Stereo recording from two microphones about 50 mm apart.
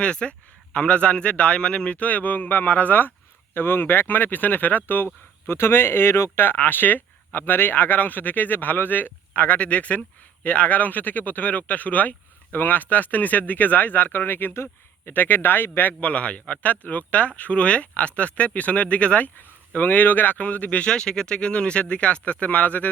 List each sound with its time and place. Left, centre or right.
0.0 s a man's voice: left
5.5 s speech: left
6.4 s speech: left
15.1 s a man's voice: left